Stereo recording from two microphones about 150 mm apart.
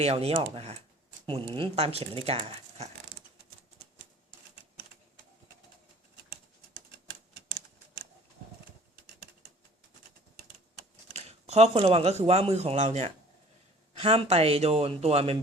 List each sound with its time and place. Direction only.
0.0 s speech: 45° right (ahead or behind)
11.1 s speech: 45° right (ahead or behind)